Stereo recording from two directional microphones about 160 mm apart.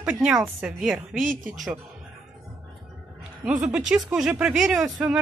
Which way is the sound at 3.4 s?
5° right (ahead or behind).